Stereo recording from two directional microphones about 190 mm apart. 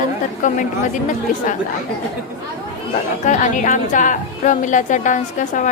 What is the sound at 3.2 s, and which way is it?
A woman's voice, 40° left (ahead or behind).